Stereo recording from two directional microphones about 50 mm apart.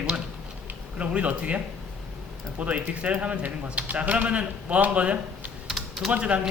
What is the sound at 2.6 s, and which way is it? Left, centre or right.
A man's voice, right.